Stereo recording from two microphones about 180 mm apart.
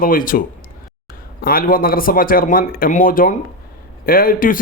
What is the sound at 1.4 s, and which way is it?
Speech, 55° left (ahead or behind).